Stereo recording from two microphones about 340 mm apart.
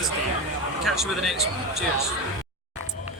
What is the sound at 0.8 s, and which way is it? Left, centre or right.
Speech, centre.